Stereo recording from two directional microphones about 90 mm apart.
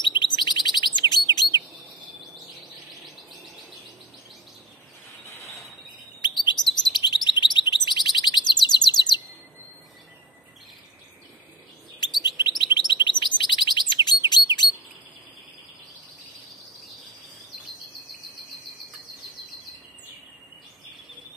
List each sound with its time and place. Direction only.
0.0 s chirp: 60° left (ahead or behind)
5.3 s a sound: 30° left (ahead or behind)
6.4 s chirp: 55° left (ahead or behind)
12.2 s chirp: 55° left (ahead or behind)